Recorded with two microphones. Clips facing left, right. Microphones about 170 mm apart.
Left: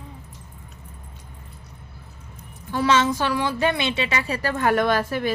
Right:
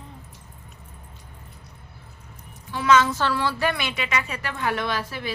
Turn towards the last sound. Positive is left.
turn(degrees=50)  # may be behind; listen again after turning